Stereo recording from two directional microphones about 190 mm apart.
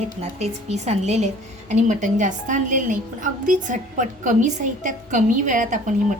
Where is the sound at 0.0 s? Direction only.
35° right (ahead or behind).